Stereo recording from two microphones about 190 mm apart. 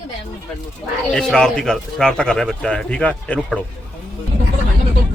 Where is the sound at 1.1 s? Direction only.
Centre (ahead or behind).